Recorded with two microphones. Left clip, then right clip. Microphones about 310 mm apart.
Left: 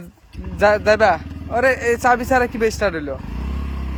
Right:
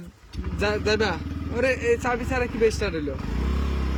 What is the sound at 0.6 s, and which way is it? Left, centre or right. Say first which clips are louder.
Speech: left 10 dB; centre.